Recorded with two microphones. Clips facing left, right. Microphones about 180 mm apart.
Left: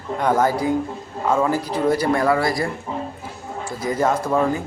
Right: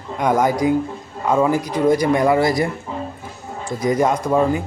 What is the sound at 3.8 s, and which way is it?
Speech, 15° right (ahead or behind).